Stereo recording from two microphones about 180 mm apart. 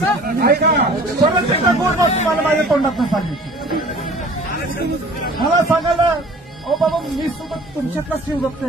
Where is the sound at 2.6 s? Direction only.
Centre (ahead or behind).